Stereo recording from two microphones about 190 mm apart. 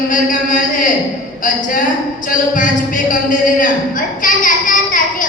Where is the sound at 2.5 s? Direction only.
45° left (ahead or behind).